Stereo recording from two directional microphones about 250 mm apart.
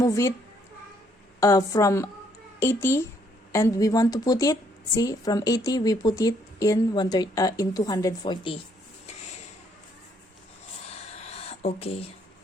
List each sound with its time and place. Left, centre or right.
0.0 s speech: centre
1.4 s speech: centre
11.2 s a sound: left